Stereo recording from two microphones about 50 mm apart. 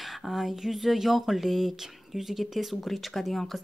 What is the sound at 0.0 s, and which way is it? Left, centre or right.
A woman's voice, centre.